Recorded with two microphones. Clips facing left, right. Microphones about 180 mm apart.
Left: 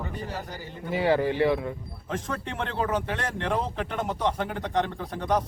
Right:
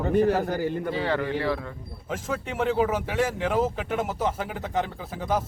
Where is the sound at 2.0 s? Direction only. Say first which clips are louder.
Right 1 dB; 5° right (ahead or behind).